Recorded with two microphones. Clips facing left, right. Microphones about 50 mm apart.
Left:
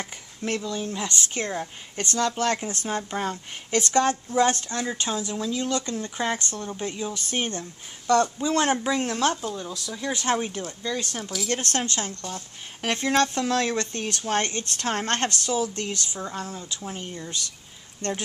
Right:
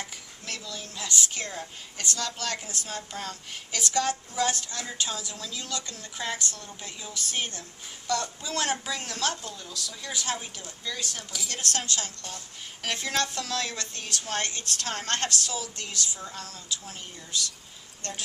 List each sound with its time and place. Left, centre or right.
0.4 s speech: left
10.1 s speech: left